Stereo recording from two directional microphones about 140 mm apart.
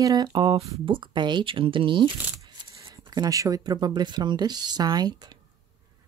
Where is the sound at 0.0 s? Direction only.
30° right (ahead or behind).